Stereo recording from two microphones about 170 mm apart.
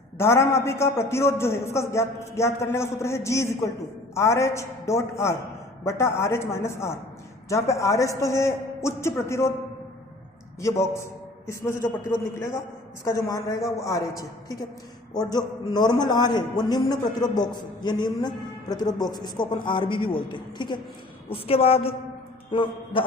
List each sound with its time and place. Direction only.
0.2 s a man's voice: 15° left (ahead or behind)
10.6 s a man's voice: 15° left (ahead or behind)